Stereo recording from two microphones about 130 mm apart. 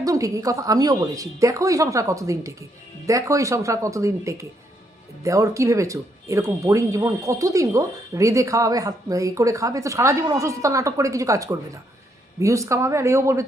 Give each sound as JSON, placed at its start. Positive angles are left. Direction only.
{"t": 0.0, "sound": "speech", "side_deg": -25}